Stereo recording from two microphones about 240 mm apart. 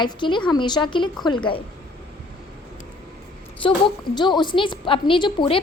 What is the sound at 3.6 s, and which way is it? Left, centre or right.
A woman's voice, left.